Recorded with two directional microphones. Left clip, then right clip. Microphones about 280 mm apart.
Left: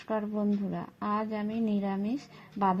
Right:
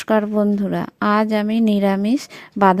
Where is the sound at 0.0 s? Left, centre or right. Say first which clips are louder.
Right 14 dB; right.